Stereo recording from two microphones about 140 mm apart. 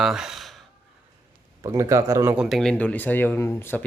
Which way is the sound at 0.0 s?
5° right (ahead or behind).